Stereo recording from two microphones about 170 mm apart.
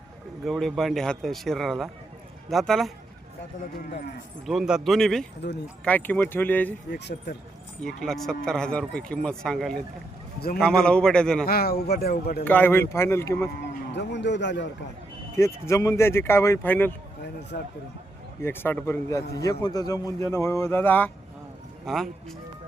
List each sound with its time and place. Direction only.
0.4 s speech: centre (ahead or behind)
4.4 s speech: centre (ahead or behind)
5.4 s speech: 90° left
5.8 s a man's voice: 10° left (ahead or behind)
6.9 s a man's voice: 75° left (ahead or behind)
7.8 s speech: centre (ahead or behind)
11.4 s a man's voice: 65° left (ahead or behind)
12.5 s a man's voice: 10° left (ahead or behind)
13.9 s a man's voice: 90° left
15.4 s a man's voice: 15° left (ahead or behind)
17.5 s speech: 60° left (ahead or behind)
18.4 s a man's voice: 15° left (ahead or behind)